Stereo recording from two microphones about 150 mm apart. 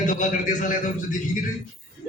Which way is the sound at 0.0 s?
55° left (ahead or behind).